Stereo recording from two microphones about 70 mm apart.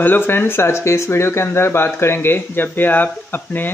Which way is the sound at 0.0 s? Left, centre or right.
Left.